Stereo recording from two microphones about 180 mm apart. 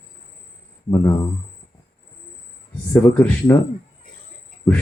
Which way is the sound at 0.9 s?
20° left (ahead or behind).